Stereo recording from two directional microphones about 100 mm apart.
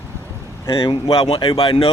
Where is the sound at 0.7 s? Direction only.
60° left (ahead or behind).